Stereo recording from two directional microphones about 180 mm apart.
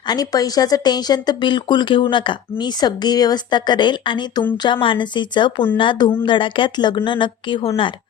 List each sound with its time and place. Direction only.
0.1 s speech: 20° left (ahead or behind)